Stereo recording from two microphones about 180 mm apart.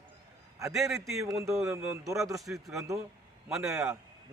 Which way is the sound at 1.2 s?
15° right (ahead or behind).